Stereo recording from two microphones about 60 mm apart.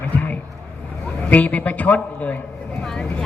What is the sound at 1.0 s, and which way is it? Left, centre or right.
A man's voice, left.